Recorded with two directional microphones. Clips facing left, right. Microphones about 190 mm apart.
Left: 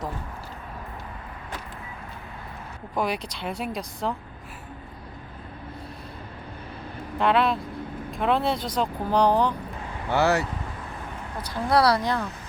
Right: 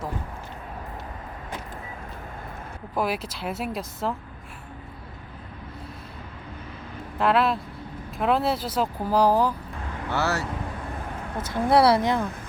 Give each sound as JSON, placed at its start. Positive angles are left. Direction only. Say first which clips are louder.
{"t": 2.9, "sound": "speech", "louder": "even", "side_deg": -5}
{"t": 7.2, "sound": "speech", "louder": "even", "side_deg": 0}
{"t": 10.1, "sound": "speech", "louder": "left 5 dB", "side_deg": 15}
{"t": 11.4, "sound": "speech", "louder": "right 2 dB", "side_deg": -25}